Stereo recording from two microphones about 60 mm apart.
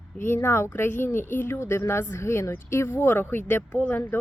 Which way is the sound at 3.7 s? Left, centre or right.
Left.